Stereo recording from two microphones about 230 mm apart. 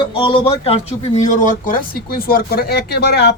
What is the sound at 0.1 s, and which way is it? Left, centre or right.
A man's voice, left.